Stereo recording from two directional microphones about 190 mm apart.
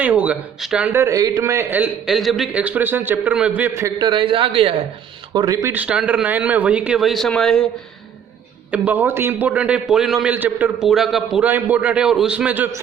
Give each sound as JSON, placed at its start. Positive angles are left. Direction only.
{"t": 0.0, "sound": "a man's voice", "side_deg": -5}
{"t": 4.0, "sound": "a man's voice", "side_deg": -25}
{"t": 5.6, "sound": "a man's voice", "side_deg": -10}
{"t": 8.7, "sound": "a man's voice", "side_deg": -10}